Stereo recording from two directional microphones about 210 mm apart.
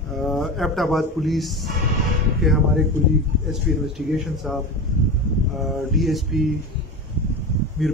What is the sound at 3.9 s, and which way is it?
Speech, centre (ahead or behind).